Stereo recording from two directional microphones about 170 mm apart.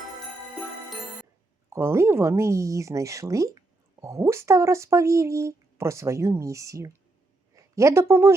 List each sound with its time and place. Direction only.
1.7 s a woman's voice: 15° right (ahead or behind)